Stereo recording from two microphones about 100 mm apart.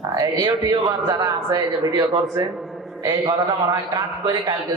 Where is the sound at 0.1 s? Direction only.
40° right (ahead or behind).